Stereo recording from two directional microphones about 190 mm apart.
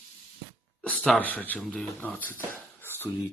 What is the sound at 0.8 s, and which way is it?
Speech, 5° left (ahead or behind).